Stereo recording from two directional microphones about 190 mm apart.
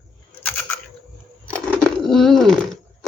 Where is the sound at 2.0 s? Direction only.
Centre (ahead or behind).